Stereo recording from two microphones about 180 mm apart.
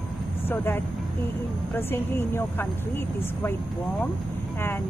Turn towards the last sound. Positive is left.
turn(degrees=15)  # may be behind; listen again after turning